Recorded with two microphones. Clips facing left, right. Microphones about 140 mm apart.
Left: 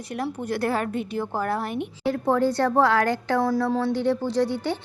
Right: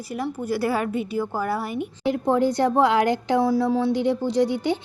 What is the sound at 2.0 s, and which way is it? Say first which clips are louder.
A woman's voice: right 1 dB; 15° right (ahead or behind).